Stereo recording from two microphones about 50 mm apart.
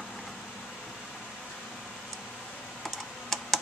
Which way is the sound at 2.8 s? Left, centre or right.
Centre.